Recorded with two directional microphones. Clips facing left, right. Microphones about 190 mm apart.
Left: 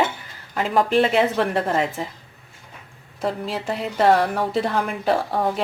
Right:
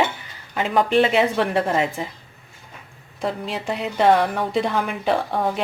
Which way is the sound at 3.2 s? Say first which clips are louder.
Left 1 dB; centre (ahead or behind).